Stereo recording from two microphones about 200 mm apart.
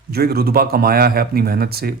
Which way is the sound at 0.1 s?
50° right (ahead or behind).